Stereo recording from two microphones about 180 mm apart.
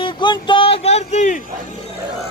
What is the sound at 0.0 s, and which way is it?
Speech, 25° left (ahead or behind).